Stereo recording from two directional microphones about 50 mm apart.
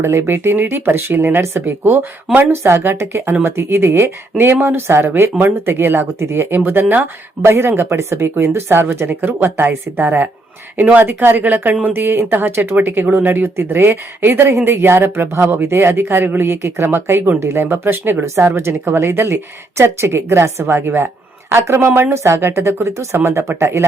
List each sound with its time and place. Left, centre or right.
0.0 s speech: right
2.4 s speech: right
2.7 s speech: right
9.0 s speech: right
11.9 s speech: right
18.4 s speech: right
21.5 s a woman's voice: right
22.4 s speech: right